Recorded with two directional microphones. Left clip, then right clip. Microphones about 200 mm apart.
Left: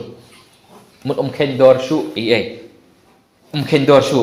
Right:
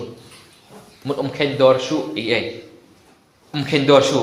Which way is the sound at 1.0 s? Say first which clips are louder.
Left 3 dB; 30° left (ahead or behind).